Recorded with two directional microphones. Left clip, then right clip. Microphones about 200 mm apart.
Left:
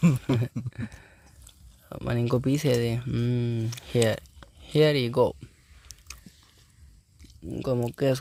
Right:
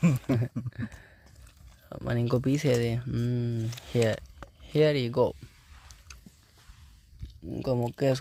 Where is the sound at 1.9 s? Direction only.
10° left (ahead or behind).